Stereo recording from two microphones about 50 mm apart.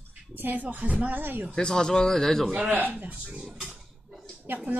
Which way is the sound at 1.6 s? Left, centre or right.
Centre.